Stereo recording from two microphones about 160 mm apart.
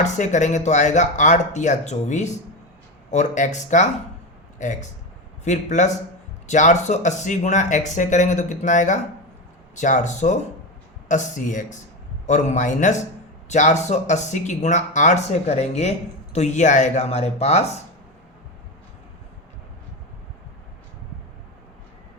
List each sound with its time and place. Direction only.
0.0 s speech: 50° left (ahead or behind)